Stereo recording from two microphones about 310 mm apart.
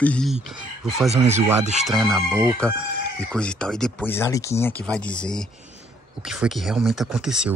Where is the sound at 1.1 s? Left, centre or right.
Right.